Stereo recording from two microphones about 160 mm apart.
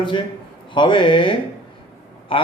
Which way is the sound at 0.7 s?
30° left (ahead or behind).